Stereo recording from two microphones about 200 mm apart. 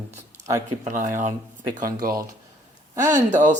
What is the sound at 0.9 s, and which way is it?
Speech, 40° right (ahead or behind).